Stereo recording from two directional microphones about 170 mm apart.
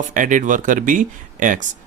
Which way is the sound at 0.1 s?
50° right (ahead or behind).